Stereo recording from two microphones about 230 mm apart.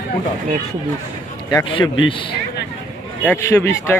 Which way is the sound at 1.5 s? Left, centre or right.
Centre.